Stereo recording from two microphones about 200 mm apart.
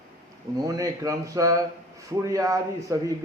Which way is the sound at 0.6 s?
15° right (ahead or behind).